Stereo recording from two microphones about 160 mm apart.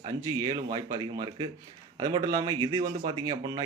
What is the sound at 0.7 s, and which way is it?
Speech, 25° right (ahead or behind).